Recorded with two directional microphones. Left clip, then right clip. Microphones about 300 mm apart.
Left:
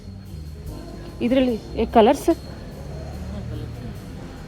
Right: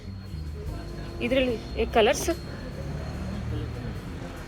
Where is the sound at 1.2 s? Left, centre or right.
Left.